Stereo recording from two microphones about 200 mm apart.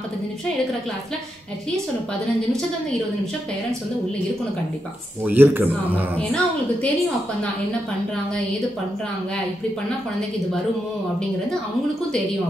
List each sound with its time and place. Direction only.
5.2 s speech: 10° right (ahead or behind)
6.1 s a woman's voice: 5° left (ahead or behind)